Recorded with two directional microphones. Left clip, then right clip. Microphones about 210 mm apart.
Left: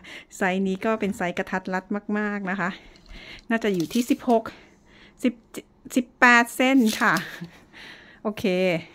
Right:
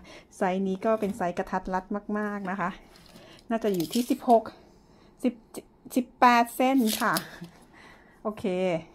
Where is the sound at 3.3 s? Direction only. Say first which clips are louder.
Left 3 dB; 30° left (ahead or behind).